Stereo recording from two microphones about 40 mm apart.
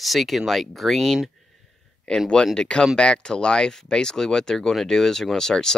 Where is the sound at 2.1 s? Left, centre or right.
Centre.